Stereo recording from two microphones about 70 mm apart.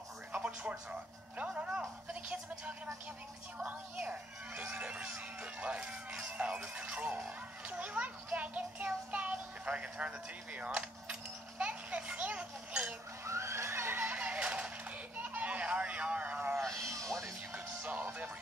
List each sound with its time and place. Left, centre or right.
0.3 s music: centre
3.5 s a child's voice: centre
13.2 s neigh: right
14.0 s a sound: centre
16.3 s a sound: right
16.7 s music: right
17.8 s music: right